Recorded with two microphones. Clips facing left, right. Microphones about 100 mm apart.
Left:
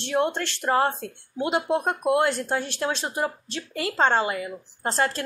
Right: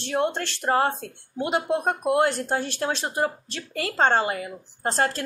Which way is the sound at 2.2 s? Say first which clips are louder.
Right 1 dB; 45° right (ahead or behind).